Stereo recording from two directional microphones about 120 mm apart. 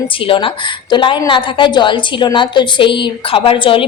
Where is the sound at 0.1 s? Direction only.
45° left (ahead or behind).